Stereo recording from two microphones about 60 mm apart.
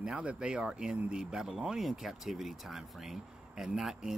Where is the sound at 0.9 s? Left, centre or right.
Right.